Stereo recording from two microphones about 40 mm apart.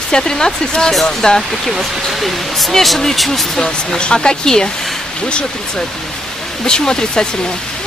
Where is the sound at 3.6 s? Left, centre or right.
Centre.